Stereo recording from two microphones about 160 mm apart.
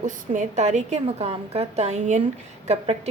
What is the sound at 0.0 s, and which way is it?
A woman's voice, 50° right (ahead or behind).